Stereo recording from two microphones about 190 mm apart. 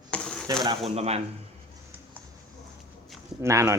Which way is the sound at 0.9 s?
35° right (ahead or behind).